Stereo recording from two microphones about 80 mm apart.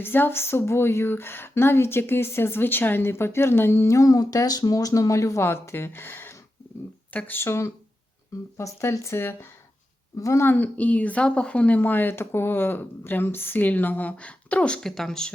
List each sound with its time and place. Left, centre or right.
0.0 s a woman's voice: left
10.2 s speech: left
10.4 s a woman's voice: left; by 15.3 s centre